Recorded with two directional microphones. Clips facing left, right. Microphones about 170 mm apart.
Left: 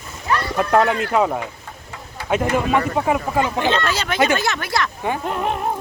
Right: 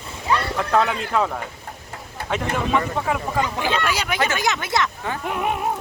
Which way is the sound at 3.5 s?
10° right (ahead or behind).